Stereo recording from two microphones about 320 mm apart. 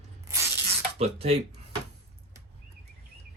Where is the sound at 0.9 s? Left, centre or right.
Centre.